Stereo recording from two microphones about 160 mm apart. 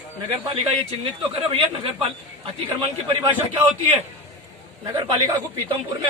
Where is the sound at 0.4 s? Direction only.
35° right (ahead or behind).